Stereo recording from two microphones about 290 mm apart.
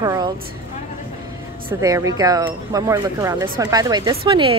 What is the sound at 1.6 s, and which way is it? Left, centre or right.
Speech, centre.